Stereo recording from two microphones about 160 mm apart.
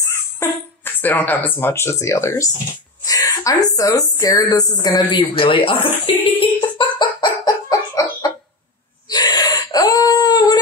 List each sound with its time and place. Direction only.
0.0 s a woman's voice: 15° left (ahead or behind); by 5.9 s 35° left (ahead or behind)
6.1 s a sound: 35° left (ahead or behind)
9.1 s whimper: 25° left (ahead or behind)